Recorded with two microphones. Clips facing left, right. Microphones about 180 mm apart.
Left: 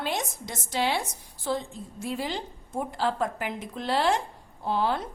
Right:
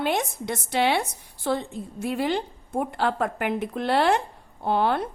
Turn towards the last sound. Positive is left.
turn(degrees=-60)  # may be behind; listen again after turning